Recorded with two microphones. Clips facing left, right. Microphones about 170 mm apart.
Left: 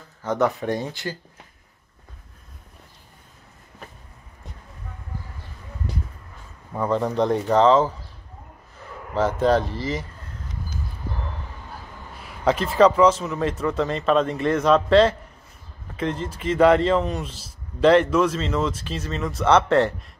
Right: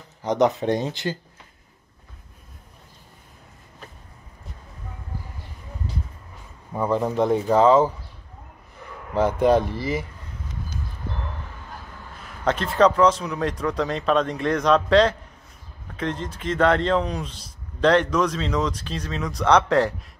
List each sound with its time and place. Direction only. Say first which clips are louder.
0.2 s speech: right 2 dB; 15° right (ahead or behind)
6.7 s speech: even; 10° right (ahead or behind)
9.1 s speech: right 1 dB; 15° right (ahead or behind)
12.2 s a man's voice: left 3 dB; 5° left (ahead or behind)